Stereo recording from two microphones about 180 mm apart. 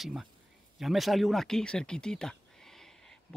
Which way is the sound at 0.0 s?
Centre (ahead or behind).